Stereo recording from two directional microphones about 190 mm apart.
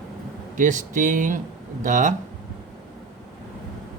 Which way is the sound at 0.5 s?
40° right (ahead or behind).